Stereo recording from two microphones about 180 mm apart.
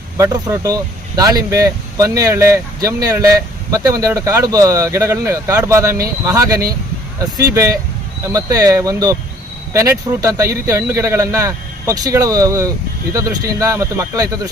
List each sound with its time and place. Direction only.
0.2 s speech: 15° right (ahead or behind)